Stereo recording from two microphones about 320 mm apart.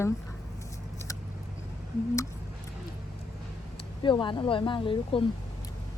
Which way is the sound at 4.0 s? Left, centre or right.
Centre.